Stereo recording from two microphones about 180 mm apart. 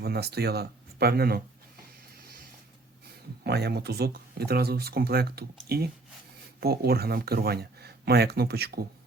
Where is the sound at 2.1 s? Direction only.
55° right (ahead or behind).